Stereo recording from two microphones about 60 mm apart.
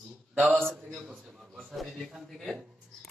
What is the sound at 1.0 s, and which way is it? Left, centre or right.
Speech, centre.